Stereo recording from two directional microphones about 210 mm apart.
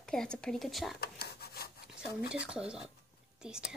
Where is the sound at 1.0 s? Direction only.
50° left (ahead or behind).